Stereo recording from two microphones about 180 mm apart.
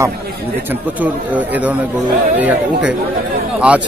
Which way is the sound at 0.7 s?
10° right (ahead or behind).